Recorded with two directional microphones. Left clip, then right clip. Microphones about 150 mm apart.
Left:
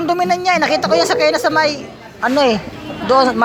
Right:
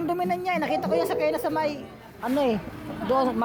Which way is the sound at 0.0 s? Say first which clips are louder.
Left 11 dB; 15° right (ahead or behind).